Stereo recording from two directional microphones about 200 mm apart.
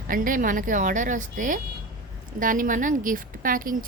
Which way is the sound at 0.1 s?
45° right (ahead or behind).